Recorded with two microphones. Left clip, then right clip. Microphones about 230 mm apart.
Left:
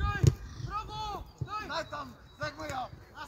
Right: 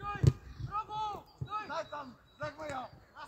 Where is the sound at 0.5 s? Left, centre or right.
Left.